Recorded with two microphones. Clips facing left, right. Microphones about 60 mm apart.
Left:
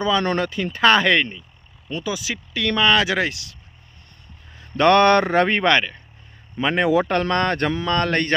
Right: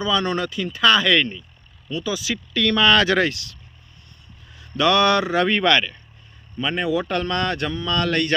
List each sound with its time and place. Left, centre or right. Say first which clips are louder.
0.0 s speech: left 2 dB; left
1.2 s speech: right 1 dB; centre
4.4 s speech: left 3 dB; left
5.5 s speech: even; left
6.6 s speech: left 4 dB; left